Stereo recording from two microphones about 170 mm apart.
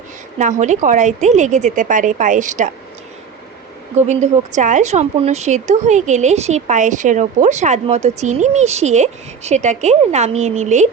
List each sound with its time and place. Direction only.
0.3 s a woman's voice: 45° right (ahead or behind)
4.0 s a woman's voice: 40° right (ahead or behind)